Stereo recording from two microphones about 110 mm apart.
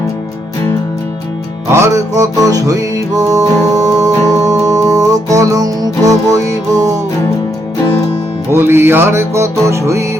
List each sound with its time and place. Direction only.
1.7 s music: 25° right (ahead or behind)
8.4 s music: 20° right (ahead or behind)